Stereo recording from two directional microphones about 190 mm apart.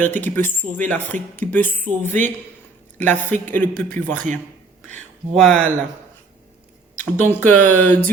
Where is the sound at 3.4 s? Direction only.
10° left (ahead or behind).